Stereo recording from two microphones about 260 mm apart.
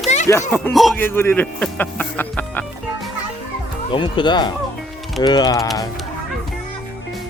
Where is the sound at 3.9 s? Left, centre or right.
Centre.